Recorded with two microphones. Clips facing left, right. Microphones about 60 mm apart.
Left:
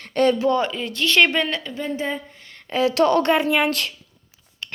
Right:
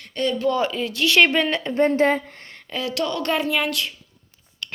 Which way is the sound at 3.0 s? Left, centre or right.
Left.